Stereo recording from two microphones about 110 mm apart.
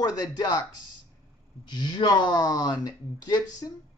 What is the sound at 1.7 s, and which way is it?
Speech, 40° left (ahead or behind).